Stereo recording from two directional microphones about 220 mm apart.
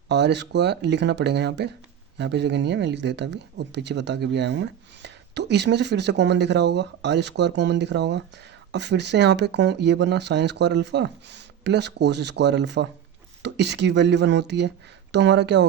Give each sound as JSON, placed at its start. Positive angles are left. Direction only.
{"t": 0.1, "sound": "speech", "side_deg": -50}